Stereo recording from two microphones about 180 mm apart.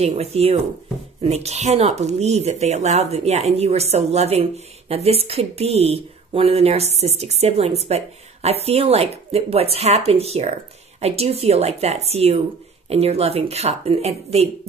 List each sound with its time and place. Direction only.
0.0 s a woman's voice: 35° right (ahead or behind)